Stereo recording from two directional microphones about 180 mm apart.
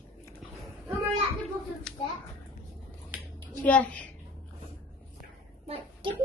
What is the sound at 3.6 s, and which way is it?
Speech, 10° left (ahead or behind).